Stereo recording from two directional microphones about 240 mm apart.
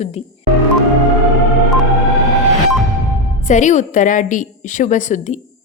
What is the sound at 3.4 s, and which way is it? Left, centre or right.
A woman's voice, left.